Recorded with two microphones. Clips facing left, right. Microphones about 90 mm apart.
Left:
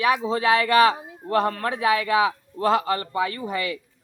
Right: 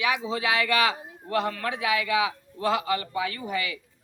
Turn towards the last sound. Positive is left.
turn(degrees=40)  # may be behind; listen again after turning